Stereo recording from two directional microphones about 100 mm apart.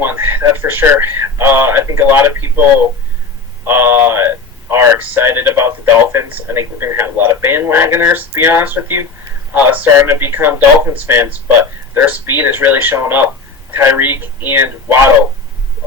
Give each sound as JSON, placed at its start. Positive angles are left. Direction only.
{"t": 0.0, "sound": "speech", "side_deg": -20}
{"t": 3.6, "sound": "speech", "side_deg": -25}